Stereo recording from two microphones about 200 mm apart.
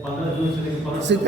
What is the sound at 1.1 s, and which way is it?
Speech, 60° right (ahead or behind).